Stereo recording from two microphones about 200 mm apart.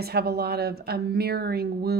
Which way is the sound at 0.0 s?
50° right (ahead or behind).